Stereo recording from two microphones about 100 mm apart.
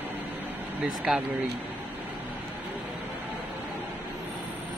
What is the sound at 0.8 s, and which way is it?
Speech, 10° right (ahead or behind).